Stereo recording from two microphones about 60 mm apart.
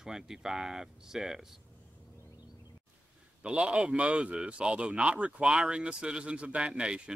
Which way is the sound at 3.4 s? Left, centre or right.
Centre.